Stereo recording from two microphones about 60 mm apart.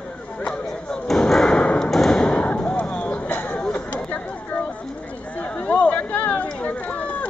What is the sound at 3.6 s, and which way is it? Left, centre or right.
Chatter, centre.